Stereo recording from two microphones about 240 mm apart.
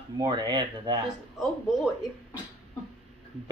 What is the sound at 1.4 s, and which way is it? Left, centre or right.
Speech, centre.